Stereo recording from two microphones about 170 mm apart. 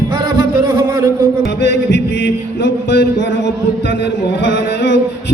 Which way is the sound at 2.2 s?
85° left.